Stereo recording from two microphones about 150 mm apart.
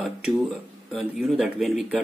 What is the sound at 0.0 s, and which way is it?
Speech, centre (ahead or behind).